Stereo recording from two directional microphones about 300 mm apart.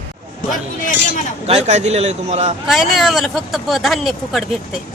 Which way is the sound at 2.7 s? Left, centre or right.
Centre.